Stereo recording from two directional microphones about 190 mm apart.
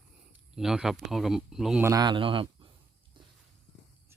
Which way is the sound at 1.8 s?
20° right (ahead or behind).